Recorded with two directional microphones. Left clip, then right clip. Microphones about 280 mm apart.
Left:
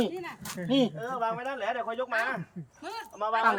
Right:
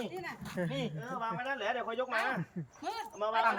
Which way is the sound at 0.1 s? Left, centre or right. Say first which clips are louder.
Left 4 dB; centre.